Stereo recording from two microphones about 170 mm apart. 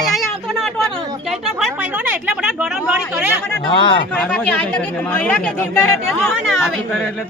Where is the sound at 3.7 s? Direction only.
30° left (ahead or behind).